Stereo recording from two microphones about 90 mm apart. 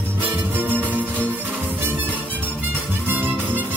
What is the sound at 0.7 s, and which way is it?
Music, 15° left (ahead or behind).